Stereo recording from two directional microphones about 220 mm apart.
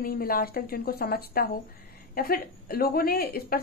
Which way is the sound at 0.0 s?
40° left (ahead or behind).